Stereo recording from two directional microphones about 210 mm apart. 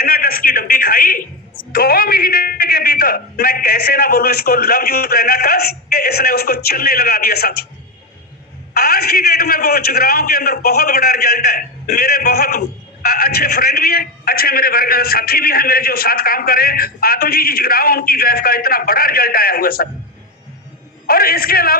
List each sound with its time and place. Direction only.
0.0 s a sound: 45° left (ahead or behind)
1.7 s a man's voice: 45° left (ahead or behind)
8.7 s a man's voice: 45° left (ahead or behind)
21.1 s a man's voice: 45° left (ahead or behind)